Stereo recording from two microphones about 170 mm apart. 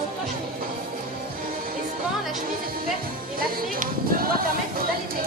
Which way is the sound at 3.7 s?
60° right (ahead or behind).